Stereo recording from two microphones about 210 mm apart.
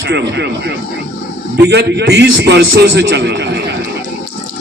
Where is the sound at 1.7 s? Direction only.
50° right (ahead or behind).